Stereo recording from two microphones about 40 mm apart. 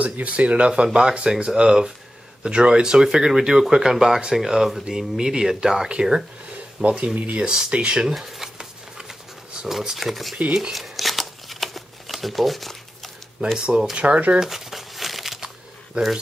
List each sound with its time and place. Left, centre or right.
0.0 s speech: right; by 5.9 s centre
5.9 s speech: right
7.2 s speech: right
7.4 s speech: right
8.1 s speech: centre
8.5 s a sound: centre
9.7 s speech: centre
10.7 s shuffling cards: centre
13.6 s speech: right
14.4 s crumpling: centre
15.4 s a sound: centre